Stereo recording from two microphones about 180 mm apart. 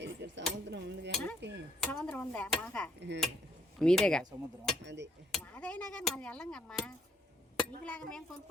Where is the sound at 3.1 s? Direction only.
75° right (ahead or behind).